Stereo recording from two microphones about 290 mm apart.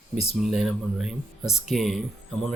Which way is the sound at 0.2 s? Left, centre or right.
Centre.